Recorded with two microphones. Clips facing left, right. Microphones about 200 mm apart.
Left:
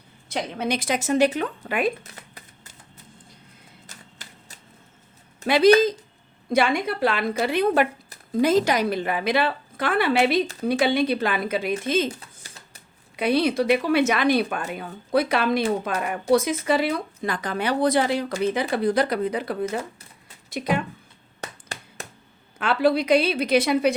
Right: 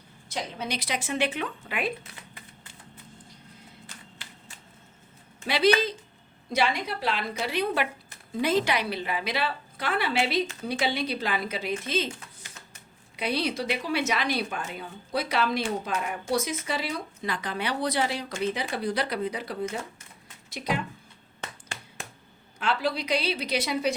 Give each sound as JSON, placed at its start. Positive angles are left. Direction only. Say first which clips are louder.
{"t": 0.3, "sound": "speech", "louder": "left 7 dB", "side_deg": 60}
{"t": 3.8, "sound": "a sound", "louder": "even", "side_deg": 40}
{"t": 5.4, "sound": "speech", "louder": "left 7 dB", "side_deg": 45}
{"t": 11.7, "sound": "speech", "louder": "left 5 dB", "side_deg": 45}
{"t": 12.2, "sound": "typing", "louder": "left 1 dB", "side_deg": 35}
{"t": 13.1, "sound": "a woman's voice", "louder": "left 8 dB", "side_deg": 50}
{"t": 21.4, "sound": "finger snapping", "louder": "left 4 dB", "side_deg": 40}
{"t": 22.5, "sound": "a woman's voice", "louder": "left 8 dB", "side_deg": 55}